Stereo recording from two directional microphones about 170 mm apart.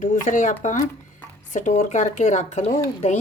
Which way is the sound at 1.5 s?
45° left (ahead or behind).